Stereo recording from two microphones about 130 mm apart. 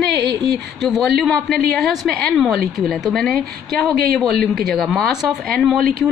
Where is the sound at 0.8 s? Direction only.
5° left (ahead or behind).